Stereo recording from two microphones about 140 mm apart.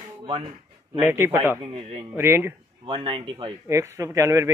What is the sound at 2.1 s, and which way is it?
Speech, 15° right (ahead or behind).